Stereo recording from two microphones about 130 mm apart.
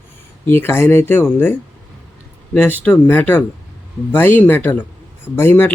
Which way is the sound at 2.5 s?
15° left (ahead or behind).